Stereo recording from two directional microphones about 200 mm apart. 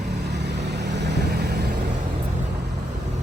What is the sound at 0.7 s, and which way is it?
Vehicle, 60° right (ahead or behind).